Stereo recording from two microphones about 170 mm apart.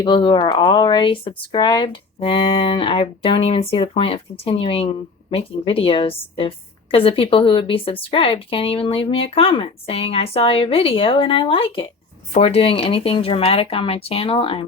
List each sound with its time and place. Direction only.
0.0 s speech: 30° left (ahead or behind)